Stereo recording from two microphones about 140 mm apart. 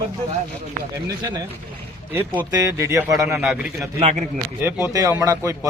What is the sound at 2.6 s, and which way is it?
Speech, 25° right (ahead or behind).